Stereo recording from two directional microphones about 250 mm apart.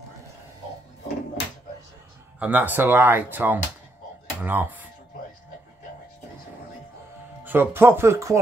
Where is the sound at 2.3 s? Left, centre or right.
Centre.